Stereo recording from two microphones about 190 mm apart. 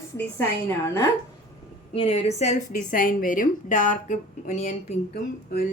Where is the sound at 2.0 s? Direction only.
35° left (ahead or behind).